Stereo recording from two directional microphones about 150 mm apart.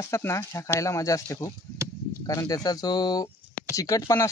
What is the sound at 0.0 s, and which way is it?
Speech, 20° left (ahead or behind).